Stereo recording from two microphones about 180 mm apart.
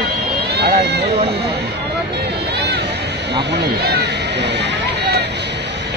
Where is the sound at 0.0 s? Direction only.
65° right (ahead or behind).